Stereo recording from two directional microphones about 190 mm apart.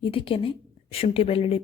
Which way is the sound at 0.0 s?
30° left (ahead or behind).